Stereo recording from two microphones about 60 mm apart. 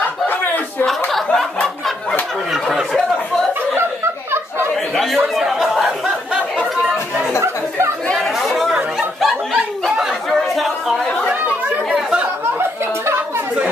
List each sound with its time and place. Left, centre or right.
0.8 s a sound: centre
4.9 s chatter: centre
8.2 s chatter: centre
9.2 s a sound: centre
10.5 s chatter: centre
11.2 s chatter: centre